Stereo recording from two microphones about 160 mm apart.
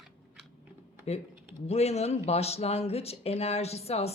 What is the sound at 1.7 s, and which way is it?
Speech, 40° left (ahead or behind).